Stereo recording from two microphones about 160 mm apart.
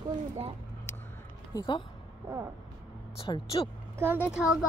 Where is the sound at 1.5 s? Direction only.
20° left (ahead or behind).